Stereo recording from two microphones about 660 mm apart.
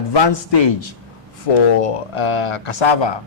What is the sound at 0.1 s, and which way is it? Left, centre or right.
A man's voice, left.